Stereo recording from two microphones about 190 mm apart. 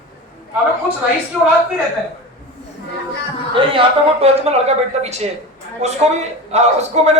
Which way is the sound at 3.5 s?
25° right (ahead or behind).